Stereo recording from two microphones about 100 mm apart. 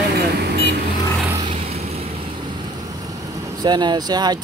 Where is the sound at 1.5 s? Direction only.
90° right.